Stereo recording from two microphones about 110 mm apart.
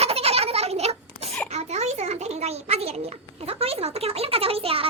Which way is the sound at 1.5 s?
85° right.